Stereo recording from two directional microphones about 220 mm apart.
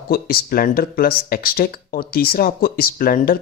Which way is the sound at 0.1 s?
45° left (ahead or behind).